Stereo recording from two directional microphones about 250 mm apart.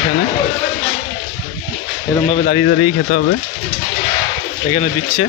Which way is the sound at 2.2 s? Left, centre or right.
Left.